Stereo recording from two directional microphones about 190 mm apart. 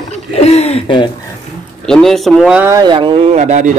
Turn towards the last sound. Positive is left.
turn(degrees=-40)  # may be behind; listen again after turning